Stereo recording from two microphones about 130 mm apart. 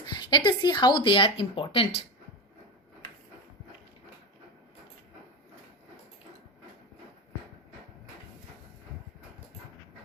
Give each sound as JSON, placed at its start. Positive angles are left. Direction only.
{"t": 0.2, "sound": "speech", "side_deg": 35}